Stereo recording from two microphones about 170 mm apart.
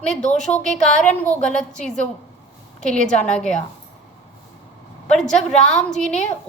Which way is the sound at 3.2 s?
5° left (ahead or behind).